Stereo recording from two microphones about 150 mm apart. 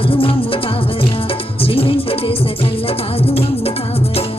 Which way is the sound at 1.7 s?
40° left (ahead or behind).